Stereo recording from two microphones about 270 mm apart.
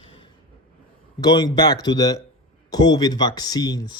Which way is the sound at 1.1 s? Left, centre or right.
Centre.